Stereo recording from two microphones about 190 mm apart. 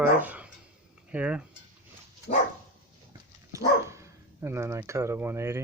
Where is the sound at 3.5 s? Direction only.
15° right (ahead or behind).